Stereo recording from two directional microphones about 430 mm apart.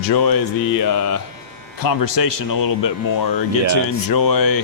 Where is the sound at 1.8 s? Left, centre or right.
Left.